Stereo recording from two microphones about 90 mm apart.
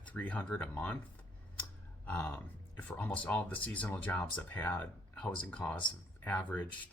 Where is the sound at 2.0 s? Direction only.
20° left (ahead or behind).